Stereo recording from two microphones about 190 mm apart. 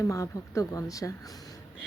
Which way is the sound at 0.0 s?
15° left (ahead or behind).